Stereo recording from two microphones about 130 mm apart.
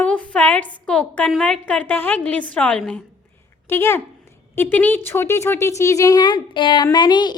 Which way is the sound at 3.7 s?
20° left (ahead or behind).